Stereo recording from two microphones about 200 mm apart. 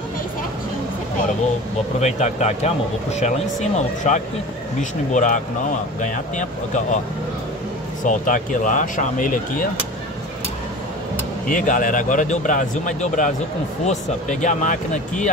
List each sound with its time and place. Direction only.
2.0 s speech: 35° left (ahead or behind)
8.0 s speech: 40° left (ahead or behind)
11.4 s speech: 40° left (ahead or behind)